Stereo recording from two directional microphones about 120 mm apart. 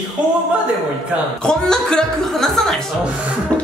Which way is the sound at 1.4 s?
5° left (ahead or behind).